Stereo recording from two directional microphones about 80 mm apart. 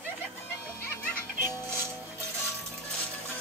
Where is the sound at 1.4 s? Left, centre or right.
Right.